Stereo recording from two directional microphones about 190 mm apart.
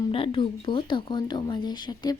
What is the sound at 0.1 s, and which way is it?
Speech, 30° left (ahead or behind).